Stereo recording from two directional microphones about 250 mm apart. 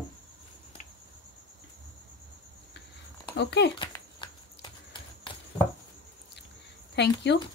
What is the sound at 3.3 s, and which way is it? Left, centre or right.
Speech, left.